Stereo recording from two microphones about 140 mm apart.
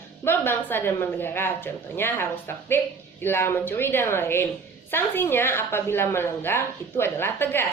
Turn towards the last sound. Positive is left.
turn(degrees=15)  # may be behind; listen again after turning